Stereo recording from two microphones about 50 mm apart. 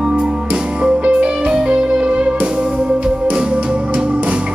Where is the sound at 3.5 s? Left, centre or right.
Right.